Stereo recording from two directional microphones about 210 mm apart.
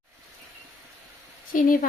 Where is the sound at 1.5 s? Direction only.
40° left (ahead or behind).